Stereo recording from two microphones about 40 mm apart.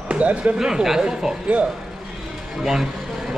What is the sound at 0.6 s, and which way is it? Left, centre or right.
Speech, centre.